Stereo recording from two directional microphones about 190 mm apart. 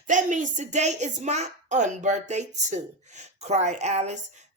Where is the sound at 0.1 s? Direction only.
40° right (ahead or behind).